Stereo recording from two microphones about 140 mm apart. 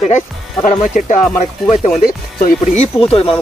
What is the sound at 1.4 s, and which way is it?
Speech, 50° left (ahead or behind).